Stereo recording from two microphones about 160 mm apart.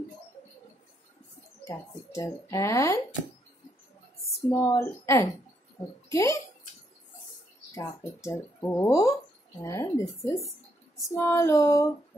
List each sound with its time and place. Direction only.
1.6 s speech: 20° left (ahead or behind)
4.5 s speech: 15° left (ahead or behind)
7.7 s speech: 15° left (ahead or behind)